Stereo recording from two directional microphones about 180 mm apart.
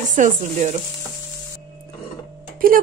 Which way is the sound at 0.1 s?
45° right (ahead or behind).